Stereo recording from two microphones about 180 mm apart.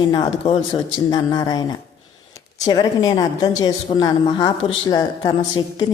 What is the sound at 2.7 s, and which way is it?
A woman's voice, 20° left (ahead or behind).